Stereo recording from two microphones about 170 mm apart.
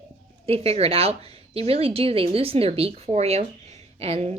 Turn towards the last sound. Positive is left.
turn(degrees=-40)  # may be behind; listen again after turning